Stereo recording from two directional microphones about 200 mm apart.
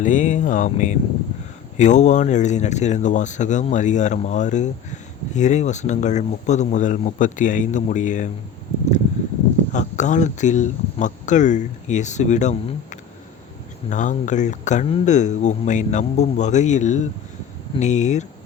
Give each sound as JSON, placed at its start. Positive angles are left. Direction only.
{"t": 0.0, "sound": "speech", "side_deg": 40}
{"t": 9.7, "sound": "speech", "side_deg": 35}
{"t": 13.9, "sound": "speech", "side_deg": 40}